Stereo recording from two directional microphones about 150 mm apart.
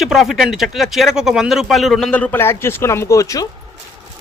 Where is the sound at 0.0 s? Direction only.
Centre (ahead or behind).